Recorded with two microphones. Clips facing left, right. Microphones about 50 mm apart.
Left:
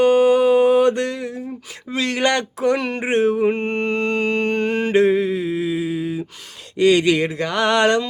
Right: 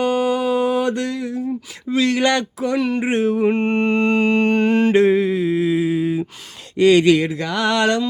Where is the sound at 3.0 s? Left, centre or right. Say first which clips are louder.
Left 1 dB; left.